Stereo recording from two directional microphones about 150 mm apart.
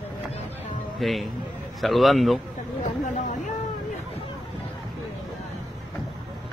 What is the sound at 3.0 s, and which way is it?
Vehicle, 55° left (ahead or behind).